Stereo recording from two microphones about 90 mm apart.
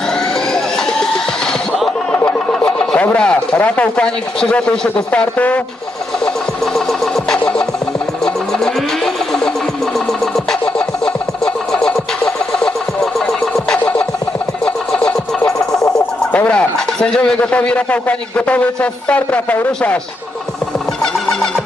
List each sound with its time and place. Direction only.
0.1 s vehicle: 5° left (ahead or behind)
2.3 s speech: 5° left (ahead or behind)
6.7 s music: 5° left (ahead or behind)
14.6 s a sound: 10° left (ahead or behind)
16.3 s speech: 15° left (ahead or behind)
21.0 s music: 5° left (ahead or behind)